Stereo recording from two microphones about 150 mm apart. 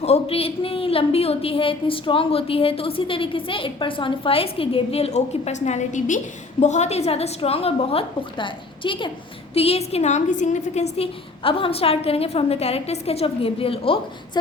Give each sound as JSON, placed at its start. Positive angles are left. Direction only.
{"t": 0.0, "sound": "a woman's voice", "side_deg": 40}